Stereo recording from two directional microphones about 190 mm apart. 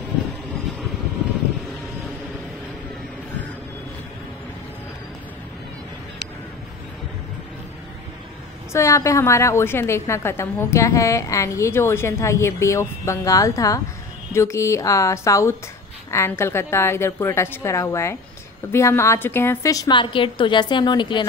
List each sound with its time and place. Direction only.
8.7 s a woman's voice: 15° left (ahead or behind)